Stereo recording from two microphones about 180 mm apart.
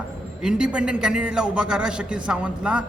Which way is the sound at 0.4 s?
5° right (ahead or behind).